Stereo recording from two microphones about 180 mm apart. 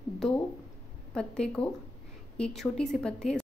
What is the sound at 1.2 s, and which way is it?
A woman's voice, 5° left (ahead or behind).